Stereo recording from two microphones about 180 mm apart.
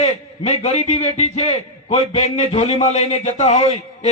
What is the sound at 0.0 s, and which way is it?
A man's voice, 35° left (ahead or behind).